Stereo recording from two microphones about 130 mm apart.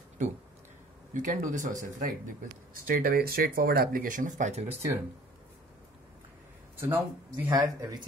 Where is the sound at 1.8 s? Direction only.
90° right; by 4.6 s 65° right (ahead or behind).